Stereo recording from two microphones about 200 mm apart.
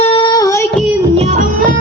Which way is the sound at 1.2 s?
40° right (ahead or behind).